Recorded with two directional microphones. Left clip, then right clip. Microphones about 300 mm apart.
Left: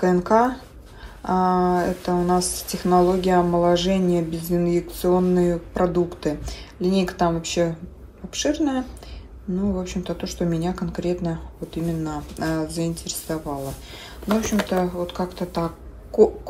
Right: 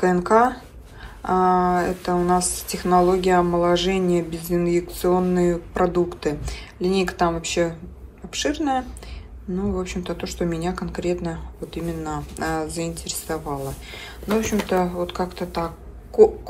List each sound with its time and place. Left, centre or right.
0.0 s speech: centre